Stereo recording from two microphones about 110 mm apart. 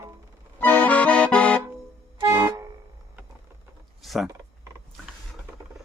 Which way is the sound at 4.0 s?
Centre (ahead or behind).